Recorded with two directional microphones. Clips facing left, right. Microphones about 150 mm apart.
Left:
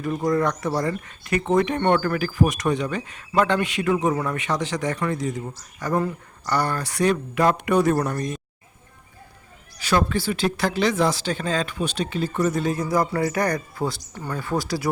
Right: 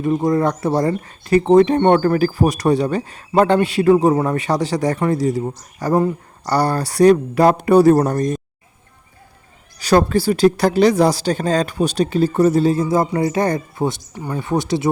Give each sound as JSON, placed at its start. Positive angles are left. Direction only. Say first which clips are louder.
{"t": 0.0, "sound": "speech", "louder": "right 5 dB", "side_deg": -25}
{"t": 9.7, "sound": "speech", "louder": "right 7 dB", "side_deg": -40}